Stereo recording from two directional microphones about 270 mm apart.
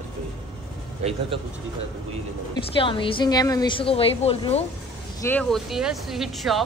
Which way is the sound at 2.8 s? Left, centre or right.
Centre.